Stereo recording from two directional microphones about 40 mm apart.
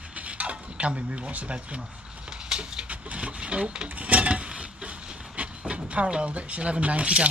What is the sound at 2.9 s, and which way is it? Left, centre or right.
Speech, right.